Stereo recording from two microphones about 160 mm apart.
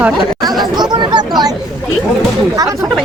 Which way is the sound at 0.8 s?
25° right (ahead or behind).